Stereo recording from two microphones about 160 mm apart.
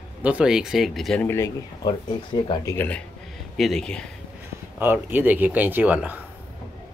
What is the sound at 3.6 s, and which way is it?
Speech, centre (ahead or behind).